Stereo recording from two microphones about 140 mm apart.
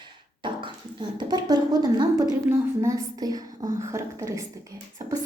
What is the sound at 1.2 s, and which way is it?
A woman's voice, 30° right (ahead or behind).